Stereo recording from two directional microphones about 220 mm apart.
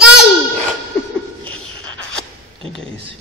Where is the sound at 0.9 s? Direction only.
5° left (ahead or behind).